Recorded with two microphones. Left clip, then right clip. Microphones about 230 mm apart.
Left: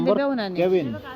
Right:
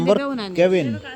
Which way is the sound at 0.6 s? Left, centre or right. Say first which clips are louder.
Right 5 dB; right.